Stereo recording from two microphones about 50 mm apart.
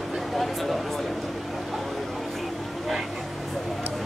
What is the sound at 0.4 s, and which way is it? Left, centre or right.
Speech, centre.